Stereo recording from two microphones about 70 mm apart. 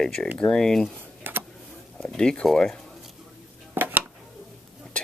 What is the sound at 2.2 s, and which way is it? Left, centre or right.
Speech, centre.